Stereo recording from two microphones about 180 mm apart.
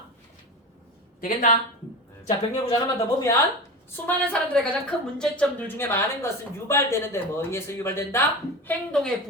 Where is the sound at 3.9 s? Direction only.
10° left (ahead or behind).